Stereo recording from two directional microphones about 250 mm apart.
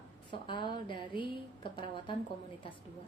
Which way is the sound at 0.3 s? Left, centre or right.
Centre.